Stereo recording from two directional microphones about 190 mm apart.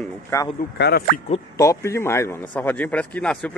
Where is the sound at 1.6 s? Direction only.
15° left (ahead or behind).